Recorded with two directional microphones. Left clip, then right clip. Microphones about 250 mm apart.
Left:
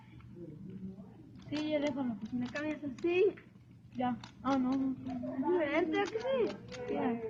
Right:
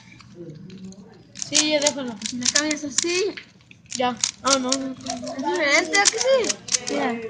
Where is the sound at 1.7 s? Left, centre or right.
Right.